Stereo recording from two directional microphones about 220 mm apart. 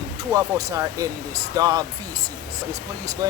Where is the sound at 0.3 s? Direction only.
15° right (ahead or behind).